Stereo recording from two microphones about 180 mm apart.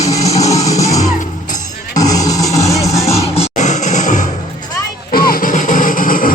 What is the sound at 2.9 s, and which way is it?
Music, 35° left (ahead or behind).